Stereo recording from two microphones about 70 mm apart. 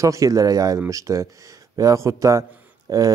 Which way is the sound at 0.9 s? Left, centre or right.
Right.